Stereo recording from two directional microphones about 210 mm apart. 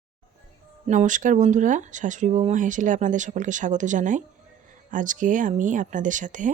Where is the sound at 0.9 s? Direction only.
35° right (ahead or behind).